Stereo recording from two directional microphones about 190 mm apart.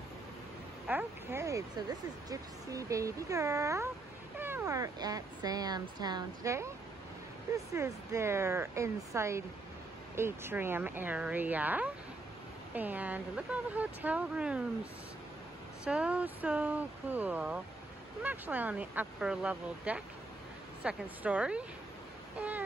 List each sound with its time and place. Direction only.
0.8 s speech: 10° right (ahead or behind)
15.8 s speech: 5° right (ahead or behind)